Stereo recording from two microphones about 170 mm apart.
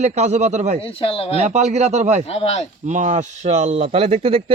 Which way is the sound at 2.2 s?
35° left (ahead or behind).